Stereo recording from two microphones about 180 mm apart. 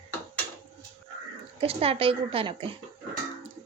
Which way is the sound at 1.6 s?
30° right (ahead or behind).